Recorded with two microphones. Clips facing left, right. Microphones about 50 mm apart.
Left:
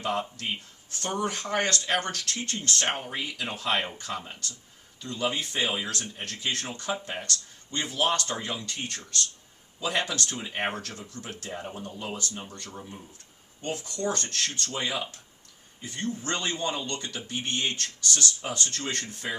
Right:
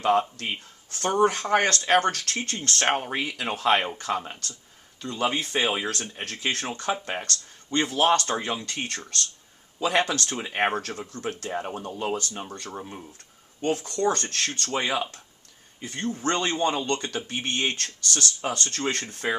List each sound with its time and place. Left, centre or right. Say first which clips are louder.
0.0 s speech: right 7 dB; right